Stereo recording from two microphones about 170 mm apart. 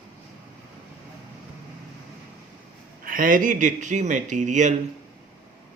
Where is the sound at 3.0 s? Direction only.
55° right (ahead or behind).